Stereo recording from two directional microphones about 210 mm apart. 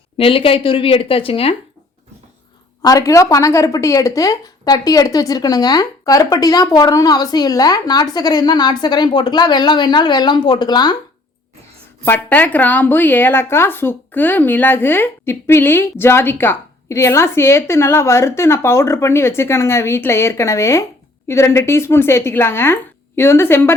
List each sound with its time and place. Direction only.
0.2 s speech: 25° left (ahead or behind)
2.8 s a woman's voice: 15° left (ahead or behind)
12.0 s a woman's voice: 10° left (ahead or behind)